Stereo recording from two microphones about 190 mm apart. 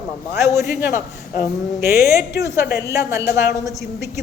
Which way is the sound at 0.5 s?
10° right (ahead or behind).